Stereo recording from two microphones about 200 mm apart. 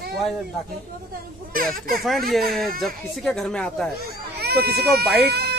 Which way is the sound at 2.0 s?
Centre (ahead or behind).